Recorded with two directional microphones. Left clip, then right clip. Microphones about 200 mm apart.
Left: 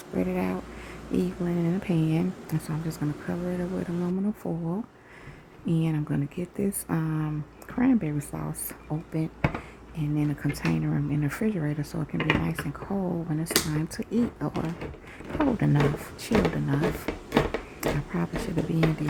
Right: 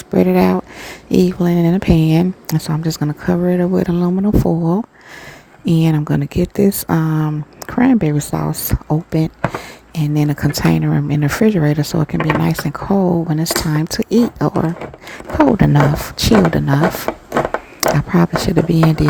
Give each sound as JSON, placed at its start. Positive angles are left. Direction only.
{"t": 0.1, "sound": "speech", "side_deg": -40}